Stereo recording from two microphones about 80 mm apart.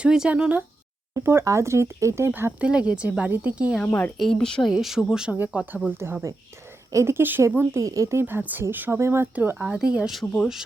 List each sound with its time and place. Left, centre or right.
0.0 s speech: centre
1.1 s speech: right
2.6 s speech: centre
3.8 s speech: left
4.2 s speech: centre
4.7 s speech: centre
6.0 s speech: right
7.9 s speech: right
8.2 s speech: right
9.6 s speech: centre
10.1 s speech: centre